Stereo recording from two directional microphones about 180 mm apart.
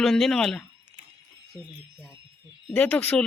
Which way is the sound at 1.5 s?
20° left (ahead or behind).